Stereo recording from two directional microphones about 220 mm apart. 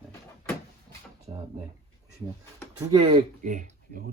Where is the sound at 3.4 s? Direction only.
35° right (ahead or behind).